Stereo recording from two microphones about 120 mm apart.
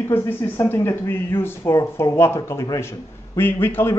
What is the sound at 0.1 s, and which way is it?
Speech, 20° left (ahead or behind).